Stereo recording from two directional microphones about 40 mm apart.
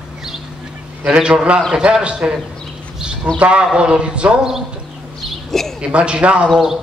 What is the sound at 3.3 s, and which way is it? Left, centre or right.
Speech, right.